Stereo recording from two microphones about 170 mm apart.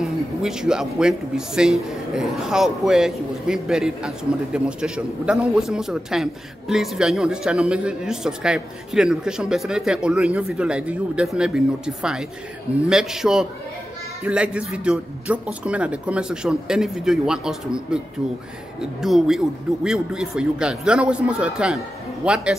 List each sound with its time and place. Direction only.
0.0 s speech: 5° right (ahead or behind)